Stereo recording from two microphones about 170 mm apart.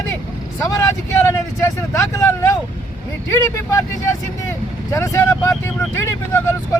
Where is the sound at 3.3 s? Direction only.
20° left (ahead or behind).